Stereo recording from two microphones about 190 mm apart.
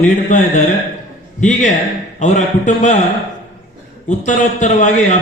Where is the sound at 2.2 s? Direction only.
40° left (ahead or behind).